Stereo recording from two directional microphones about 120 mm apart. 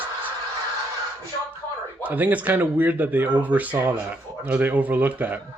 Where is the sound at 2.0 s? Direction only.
15° right (ahead or behind).